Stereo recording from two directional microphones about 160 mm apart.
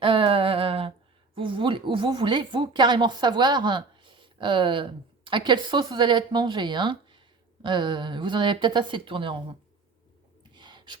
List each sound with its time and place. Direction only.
0.0 s a sound: 35° right (ahead or behind)
1.4 s speech: 30° right (ahead or behind)
10.5 s gasp: 30° right (ahead or behind)